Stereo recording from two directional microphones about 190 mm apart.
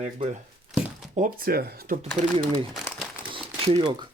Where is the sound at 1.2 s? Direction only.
50° right (ahead or behind).